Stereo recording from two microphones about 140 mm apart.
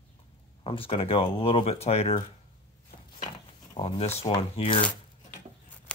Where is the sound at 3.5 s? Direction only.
40° left (ahead or behind).